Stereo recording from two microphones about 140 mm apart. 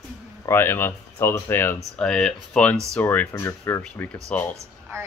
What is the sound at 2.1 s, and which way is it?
Speech, 5° left (ahead or behind).